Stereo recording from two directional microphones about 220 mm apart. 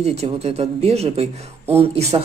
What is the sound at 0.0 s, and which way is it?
Speech, 30° right (ahead or behind).